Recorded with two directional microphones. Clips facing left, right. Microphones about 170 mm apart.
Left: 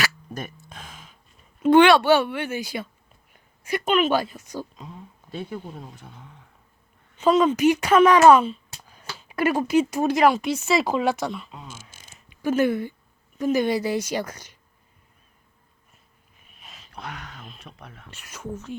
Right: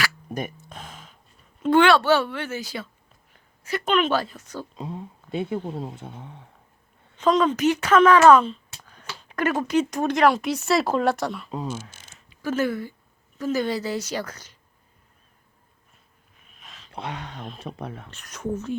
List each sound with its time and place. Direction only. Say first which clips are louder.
0.3 s speech: right 4 dB; 15° right (ahead or behind)
1.7 s a woman's voice: left 2 dB; 15° left (ahead or behind)
4.8 s speech: right 7 dB; 25° right (ahead or behind)
7.2 s a woman's voice: left 2 dB; 10° left (ahead or behind)
8.8 s a sound: even; 10° left (ahead or behind)
9.1 s speech: left 2 dB; 10° left (ahead or behind)
11.9 s a sound: left 1 dB; 15° left (ahead or behind)
13.4 s a woman's voice: left 3 dB; 15° left (ahead or behind)
16.4 s a sound: even; 5° left (ahead or behind)
16.9 s speech: right 4 dB; 25° right (ahead or behind)
18.1 s a woman's voice: even; 10° left (ahead or behind)